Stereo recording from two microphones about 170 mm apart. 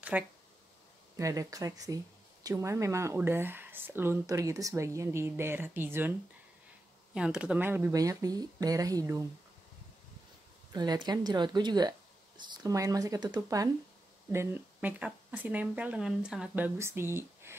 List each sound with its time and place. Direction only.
0.1 s speech: 5° right (ahead or behind)
1.1 s speech: 20° right (ahead or behind)
7.2 s speech: 5° right (ahead or behind)
10.7 s speech: 25° right (ahead or behind)